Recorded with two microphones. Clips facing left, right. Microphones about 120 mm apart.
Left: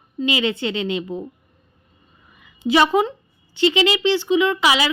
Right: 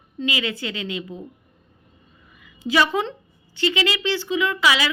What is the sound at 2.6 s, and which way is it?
Speech, 20° left (ahead or behind).